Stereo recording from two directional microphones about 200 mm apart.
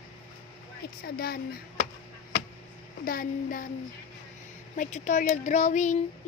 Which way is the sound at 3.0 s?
45° left (ahead or behind).